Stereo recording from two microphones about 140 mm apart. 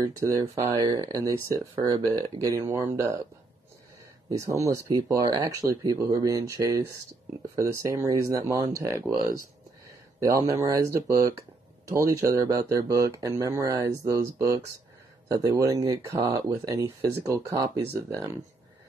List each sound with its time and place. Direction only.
0.0 s speech: 20° right (ahead or behind)
4.3 s speech: 25° right (ahead or behind)
10.2 s speech: 25° right (ahead or behind)